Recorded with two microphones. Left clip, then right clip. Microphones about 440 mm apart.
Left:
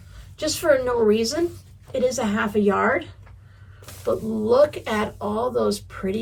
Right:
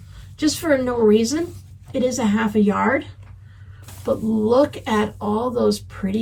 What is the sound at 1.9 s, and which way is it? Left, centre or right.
Speech, left.